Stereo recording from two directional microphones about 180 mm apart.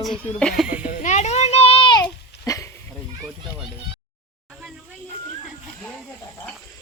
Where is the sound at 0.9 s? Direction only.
45° left (ahead or behind); by 2.7 s 20° left (ahead or behind).